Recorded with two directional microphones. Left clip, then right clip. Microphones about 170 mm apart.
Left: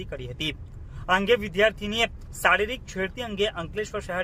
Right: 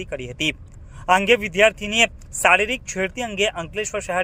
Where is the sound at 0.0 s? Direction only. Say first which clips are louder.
Right 7 dB; 20° right (ahead or behind).